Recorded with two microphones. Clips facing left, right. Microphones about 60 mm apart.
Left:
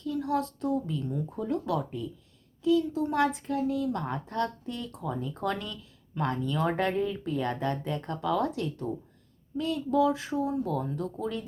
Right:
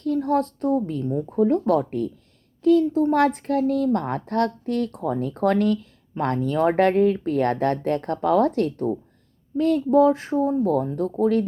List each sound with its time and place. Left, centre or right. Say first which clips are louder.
0.0 s speech: right 8 dB; right
2.6 s speech: right 8 dB; right
3.2 s speech: right 7 dB; right